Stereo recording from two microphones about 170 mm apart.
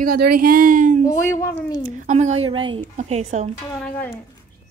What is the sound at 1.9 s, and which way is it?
Speech, 45° right (ahead or behind).